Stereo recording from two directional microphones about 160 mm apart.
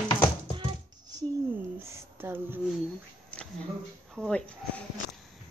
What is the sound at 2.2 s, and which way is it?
Speech, 15° right (ahead or behind).